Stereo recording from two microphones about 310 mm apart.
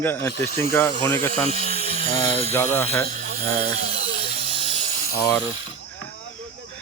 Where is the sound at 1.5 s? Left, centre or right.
Centre.